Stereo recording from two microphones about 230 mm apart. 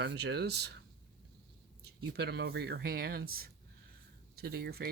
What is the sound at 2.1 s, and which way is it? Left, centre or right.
Speech, right.